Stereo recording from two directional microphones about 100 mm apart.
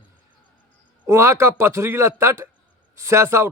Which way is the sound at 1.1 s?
30° right (ahead or behind).